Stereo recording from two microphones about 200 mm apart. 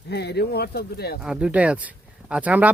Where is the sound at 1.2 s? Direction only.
5° right (ahead or behind).